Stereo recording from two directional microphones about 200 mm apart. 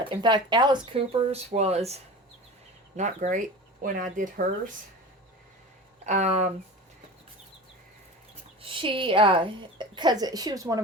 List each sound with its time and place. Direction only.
0.1 s speech: 20° right (ahead or behind); by 4.7 s 40° right (ahead or behind)
6.1 s speech: 35° right (ahead or behind)
8.6 s speech: 25° right (ahead or behind)